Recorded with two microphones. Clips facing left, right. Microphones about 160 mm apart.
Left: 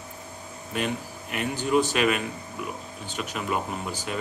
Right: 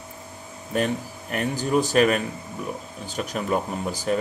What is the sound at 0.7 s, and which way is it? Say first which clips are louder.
Speech: right 5 dB; 40° right (ahead or behind).